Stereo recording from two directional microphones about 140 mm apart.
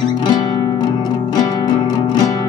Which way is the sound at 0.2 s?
30° left (ahead or behind).